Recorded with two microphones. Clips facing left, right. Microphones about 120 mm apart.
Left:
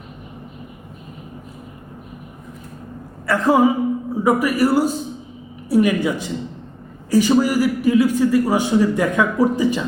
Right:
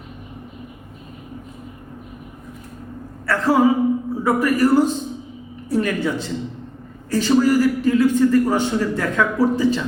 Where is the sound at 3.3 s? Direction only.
15° left (ahead or behind).